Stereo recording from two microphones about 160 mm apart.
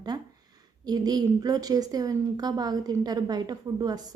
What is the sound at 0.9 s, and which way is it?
A woman's voice, 25° right (ahead or behind).